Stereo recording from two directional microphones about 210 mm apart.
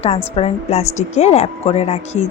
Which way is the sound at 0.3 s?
30° left (ahead or behind).